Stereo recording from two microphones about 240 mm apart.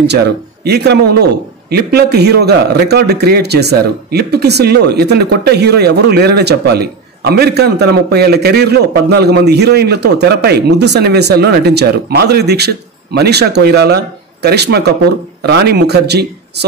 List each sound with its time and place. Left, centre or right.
0.0 s a man's voice: right